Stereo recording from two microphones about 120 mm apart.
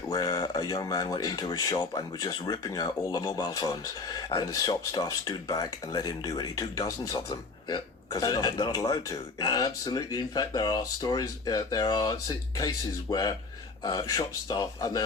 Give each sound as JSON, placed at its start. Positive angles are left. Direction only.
{"t": 0.1, "sound": "speech", "side_deg": 30}